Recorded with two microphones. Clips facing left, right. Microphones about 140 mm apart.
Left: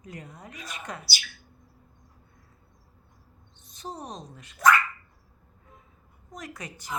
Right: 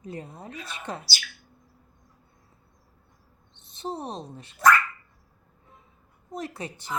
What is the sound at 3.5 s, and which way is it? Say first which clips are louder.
A woman's voice: right 5 dB; 25° right (ahead or behind).